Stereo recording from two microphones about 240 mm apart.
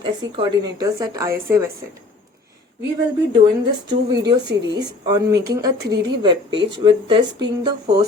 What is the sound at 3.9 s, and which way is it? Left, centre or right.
A woman's voice, centre.